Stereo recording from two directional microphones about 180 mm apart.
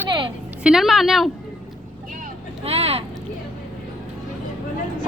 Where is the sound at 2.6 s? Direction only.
35° right (ahead or behind).